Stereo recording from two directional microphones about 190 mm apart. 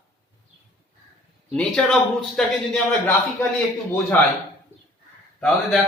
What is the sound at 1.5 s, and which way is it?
A man's voice, 5° left (ahead or behind).